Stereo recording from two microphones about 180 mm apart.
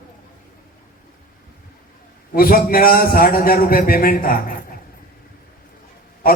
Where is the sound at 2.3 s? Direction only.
55° left (ahead or behind).